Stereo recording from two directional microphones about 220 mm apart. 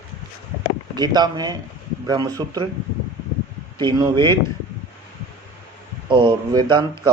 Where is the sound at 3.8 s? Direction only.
20° right (ahead or behind).